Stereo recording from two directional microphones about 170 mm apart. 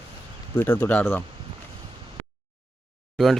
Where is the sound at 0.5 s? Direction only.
10° left (ahead or behind).